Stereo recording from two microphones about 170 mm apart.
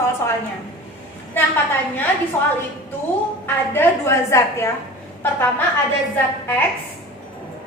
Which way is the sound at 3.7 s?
15° left (ahead or behind).